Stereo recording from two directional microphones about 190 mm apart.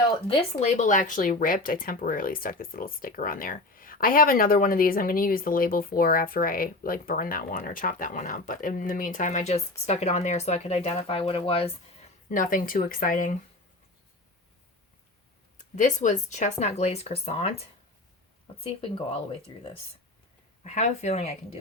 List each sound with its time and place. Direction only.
0.3 s speech: 35° left (ahead or behind)
12.3 s speech: 45° left (ahead or behind)
15.5 s speech: 40° left (ahead or behind)
20.7 s speech: 35° left (ahead or behind)